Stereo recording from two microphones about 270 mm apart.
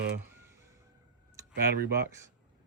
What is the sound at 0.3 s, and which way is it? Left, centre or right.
Vehicle, centre.